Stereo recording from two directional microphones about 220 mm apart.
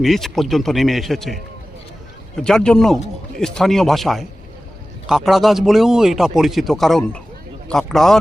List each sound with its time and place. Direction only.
0.0 s speech: centre (ahead or behind)